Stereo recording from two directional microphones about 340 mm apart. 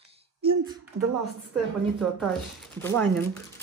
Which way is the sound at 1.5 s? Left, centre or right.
Centre.